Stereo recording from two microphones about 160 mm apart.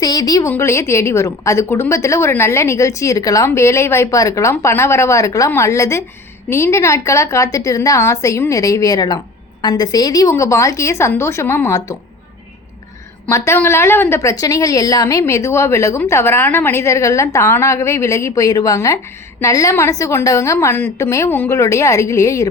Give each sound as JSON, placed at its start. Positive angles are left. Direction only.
{"t": 0.0, "sound": "a woman's voice", "side_deg": 25}
{"t": 13.2, "sound": "a woman's voice", "side_deg": 15}